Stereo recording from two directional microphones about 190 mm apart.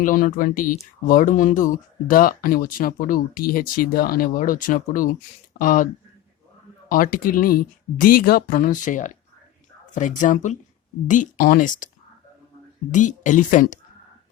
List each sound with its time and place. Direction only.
0.0 s speech: 45° left (ahead or behind)
12.9 s speech: 40° left (ahead or behind)